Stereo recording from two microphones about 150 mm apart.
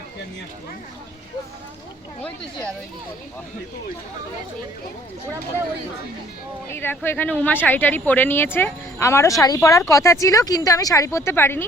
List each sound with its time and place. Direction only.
6.7 s speech: 15° left (ahead or behind)